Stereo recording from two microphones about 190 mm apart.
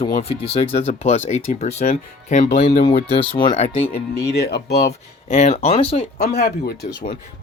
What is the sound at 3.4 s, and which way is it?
Speech, 30° left (ahead or behind).